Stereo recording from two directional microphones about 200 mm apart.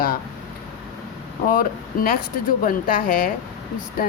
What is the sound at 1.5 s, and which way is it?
Speech, 45° left (ahead or behind).